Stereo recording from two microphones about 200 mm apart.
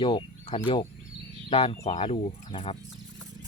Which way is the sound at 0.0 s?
25° left (ahead or behind).